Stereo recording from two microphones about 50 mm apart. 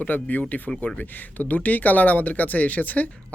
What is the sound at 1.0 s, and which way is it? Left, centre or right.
Speech, left.